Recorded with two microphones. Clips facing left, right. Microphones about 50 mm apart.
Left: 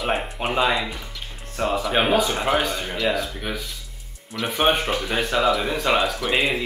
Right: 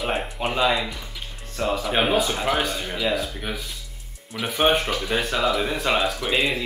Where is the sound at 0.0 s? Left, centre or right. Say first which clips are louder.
Left 1 dB; centre.